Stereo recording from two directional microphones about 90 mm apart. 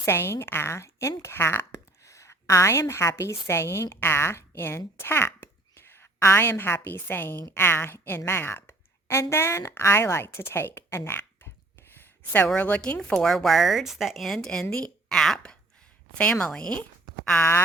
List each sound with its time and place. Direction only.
0.0 s a woman's voice: 30° left (ahead or behind); by 16.8 s 10° left (ahead or behind)